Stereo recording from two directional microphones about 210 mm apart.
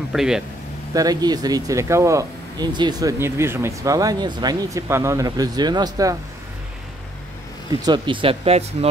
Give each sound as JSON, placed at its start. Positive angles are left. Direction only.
{"t": 0.1, "sound": "speech", "side_deg": 0}
{"t": 0.9, "sound": "speech", "side_deg": -20}
{"t": 7.8, "sound": "speech", "side_deg": -20}